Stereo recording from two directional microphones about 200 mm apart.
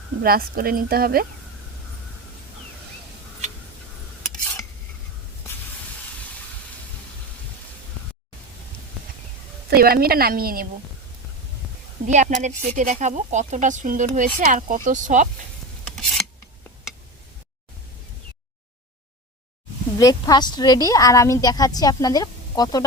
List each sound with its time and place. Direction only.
0.2 s speech: 45° right (ahead or behind)
9.6 s speech: 50° right (ahead or behind)
12.0 s speech: 40° right (ahead or behind)
15.8 s filing: centre (ahead or behind)
20.0 s a woman's voice: 20° left (ahead or behind)